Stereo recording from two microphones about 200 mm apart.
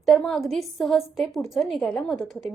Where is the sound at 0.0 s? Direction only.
Centre (ahead or behind).